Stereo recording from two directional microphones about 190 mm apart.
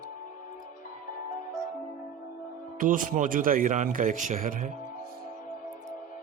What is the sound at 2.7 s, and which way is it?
A man's voice, 45° right (ahead or behind).